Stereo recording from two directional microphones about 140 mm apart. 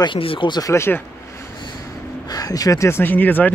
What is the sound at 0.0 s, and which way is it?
Speech, 40° left (ahead or behind).